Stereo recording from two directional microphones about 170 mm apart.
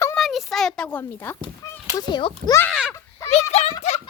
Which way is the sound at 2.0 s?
25° left (ahead or behind).